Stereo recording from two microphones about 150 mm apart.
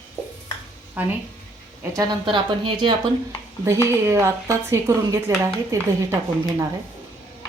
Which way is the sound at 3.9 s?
15° right (ahead or behind).